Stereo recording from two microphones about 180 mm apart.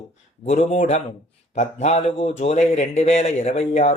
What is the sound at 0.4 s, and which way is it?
A man's voice, 35° left (ahead or behind).